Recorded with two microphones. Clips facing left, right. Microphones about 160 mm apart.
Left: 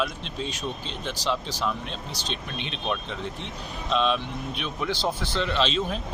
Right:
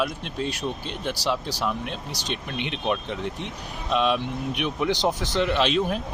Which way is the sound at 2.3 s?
60° right (ahead or behind).